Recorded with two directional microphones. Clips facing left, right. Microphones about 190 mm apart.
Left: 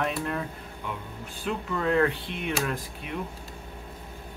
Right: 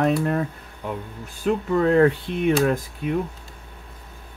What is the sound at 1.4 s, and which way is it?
Speech, 45° right (ahead or behind).